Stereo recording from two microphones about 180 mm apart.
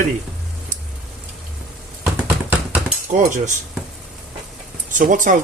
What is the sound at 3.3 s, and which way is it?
Speech, 45° right (ahead or behind).